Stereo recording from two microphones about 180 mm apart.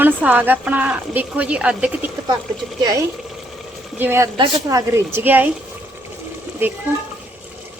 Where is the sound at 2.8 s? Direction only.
20° right (ahead or behind).